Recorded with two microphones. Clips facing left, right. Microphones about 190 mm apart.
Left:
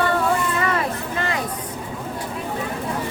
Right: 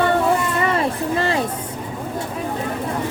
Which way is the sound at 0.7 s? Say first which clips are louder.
Right 4 dB; 30° right (ahead or behind).